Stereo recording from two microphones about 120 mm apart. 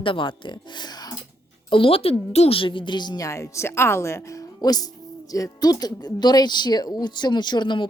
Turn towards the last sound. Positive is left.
turn(degrees=40)  # may be behind; listen again after turning